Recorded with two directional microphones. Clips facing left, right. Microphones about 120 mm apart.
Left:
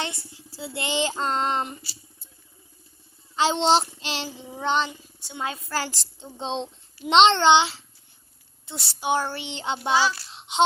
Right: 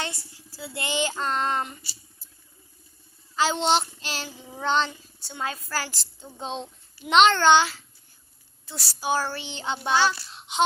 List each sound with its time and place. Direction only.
0.0 s a woman's voice: 20° left (ahead or behind)
3.3 s a woman's voice: 30° left (ahead or behind)
10.2 s child singing: 25° left (ahead or behind)